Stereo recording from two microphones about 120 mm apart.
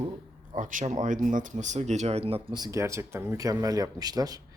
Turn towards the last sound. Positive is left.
turn(degrees=-30)  # may be behind; listen again after turning